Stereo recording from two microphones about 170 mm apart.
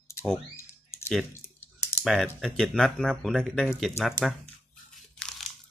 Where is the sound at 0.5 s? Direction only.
15° left (ahead or behind).